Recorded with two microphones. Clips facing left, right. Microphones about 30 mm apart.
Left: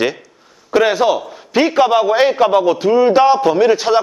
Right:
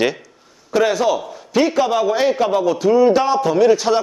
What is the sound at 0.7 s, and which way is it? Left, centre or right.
A man's voice, left.